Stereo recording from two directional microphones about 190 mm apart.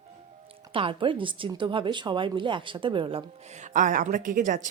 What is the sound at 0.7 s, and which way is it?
Speech, 30° right (ahead or behind).